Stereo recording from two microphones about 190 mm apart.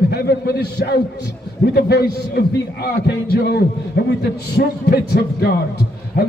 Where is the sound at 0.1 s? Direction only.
55° left (ahead or behind).